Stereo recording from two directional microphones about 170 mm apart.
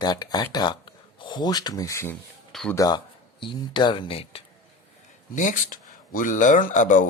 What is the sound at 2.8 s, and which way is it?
Speech, 25° left (ahead or behind).